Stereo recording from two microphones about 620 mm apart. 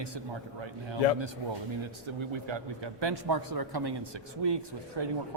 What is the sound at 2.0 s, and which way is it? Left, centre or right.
Speech, right.